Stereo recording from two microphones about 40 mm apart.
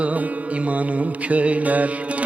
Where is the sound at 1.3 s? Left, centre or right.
Right.